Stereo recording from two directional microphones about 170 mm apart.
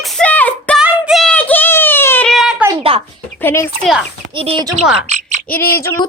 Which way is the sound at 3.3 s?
15° left (ahead or behind).